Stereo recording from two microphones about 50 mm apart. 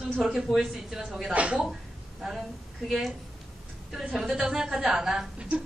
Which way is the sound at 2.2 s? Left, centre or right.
Centre.